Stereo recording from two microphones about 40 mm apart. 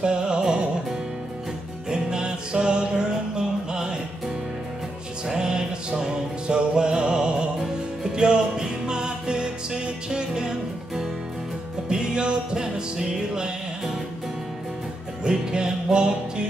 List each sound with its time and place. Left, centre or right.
0.0 s music: right
1.9 s music: centre
5.3 s music: centre
11.9 s music: right
15.2 s music: right